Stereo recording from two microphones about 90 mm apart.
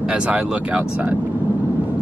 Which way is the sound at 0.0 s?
10° right (ahead or behind).